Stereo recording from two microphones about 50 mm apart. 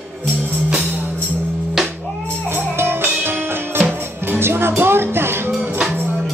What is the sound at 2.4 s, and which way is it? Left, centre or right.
Music, right.